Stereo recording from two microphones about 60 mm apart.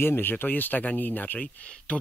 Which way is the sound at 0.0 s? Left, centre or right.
Left.